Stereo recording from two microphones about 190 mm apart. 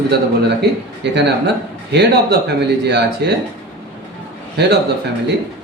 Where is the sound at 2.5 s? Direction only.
60° right (ahead or behind).